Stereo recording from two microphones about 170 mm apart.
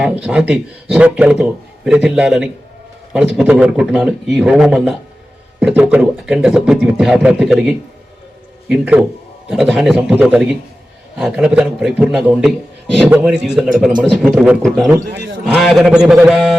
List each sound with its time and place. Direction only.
0.0 s speech: 5° right (ahead or behind)
15.0 s speech: 80° right
15.4 s speech: centre (ahead or behind)